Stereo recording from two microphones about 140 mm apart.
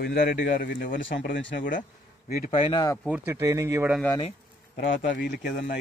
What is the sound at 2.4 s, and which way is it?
Speech, 45° left (ahead or behind).